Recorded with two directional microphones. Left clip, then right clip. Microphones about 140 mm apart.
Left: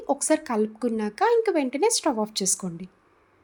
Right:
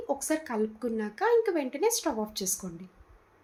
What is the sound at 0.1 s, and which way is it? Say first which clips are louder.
A woman's voice: left 7 dB; 90° left.